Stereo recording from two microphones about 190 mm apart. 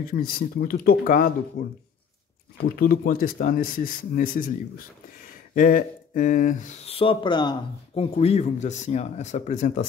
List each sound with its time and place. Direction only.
0.0 s speech: 50° left (ahead or behind)
5.5 s speech: 45° left (ahead or behind)
7.0 s speech: 25° left (ahead or behind); by 9.8 s 40° left (ahead or behind)